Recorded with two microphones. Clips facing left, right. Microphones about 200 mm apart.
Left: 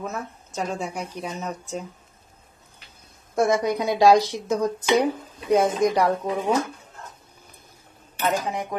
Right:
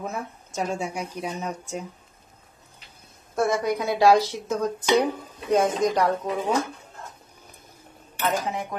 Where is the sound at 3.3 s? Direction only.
20° left (ahead or behind).